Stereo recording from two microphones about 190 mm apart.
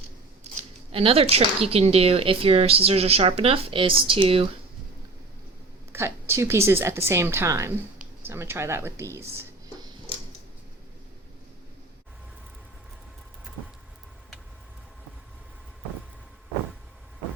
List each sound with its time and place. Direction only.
0.9 s speech: 30° right (ahead or behind)
5.9 s a woman's voice: 15° right (ahead or behind)
9.1 s a sound: 15° right (ahead or behind)